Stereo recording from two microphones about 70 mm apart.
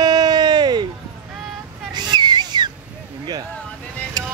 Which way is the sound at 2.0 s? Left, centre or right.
Right.